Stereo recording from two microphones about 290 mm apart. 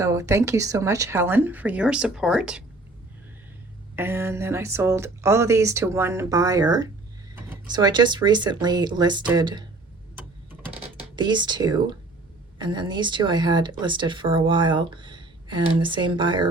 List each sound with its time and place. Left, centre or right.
0.0 s speech: centre
3.9 s speech: centre
11.2 s speech: centre